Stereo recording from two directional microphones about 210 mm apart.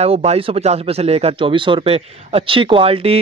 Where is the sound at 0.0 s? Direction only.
30° right (ahead or behind).